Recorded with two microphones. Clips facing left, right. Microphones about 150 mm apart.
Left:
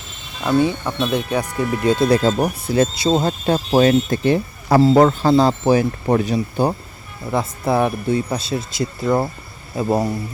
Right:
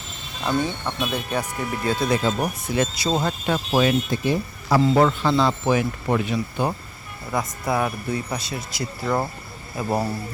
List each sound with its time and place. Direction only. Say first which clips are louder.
0.4 s speech: left 6 dB; 10° left (ahead or behind)
2.0 s speech: left 6 dB; 35° left (ahead or behind)